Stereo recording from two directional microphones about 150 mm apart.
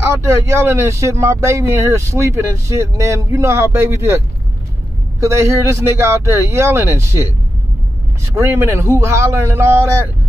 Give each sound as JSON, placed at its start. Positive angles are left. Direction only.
{"t": 0.0, "sound": "speech", "side_deg": -20}
{"t": 5.2, "sound": "speech", "side_deg": -20}
{"t": 8.4, "sound": "speech", "side_deg": -15}